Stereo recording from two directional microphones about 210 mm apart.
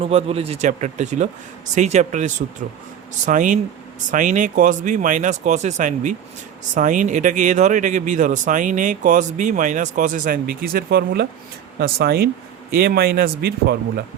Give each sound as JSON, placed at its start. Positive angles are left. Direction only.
{"t": 0.0, "sound": "speech", "side_deg": -30}